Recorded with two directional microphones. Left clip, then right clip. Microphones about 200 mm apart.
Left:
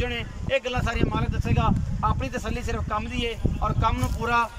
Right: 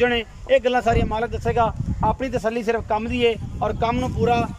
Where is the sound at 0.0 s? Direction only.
45° right (ahead or behind).